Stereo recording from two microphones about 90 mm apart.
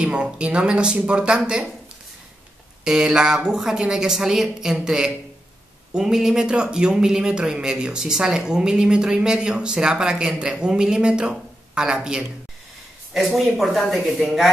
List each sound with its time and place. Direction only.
0.0 s speech: 10° right (ahead or behind)
2.8 s speech: 5° right (ahead or behind)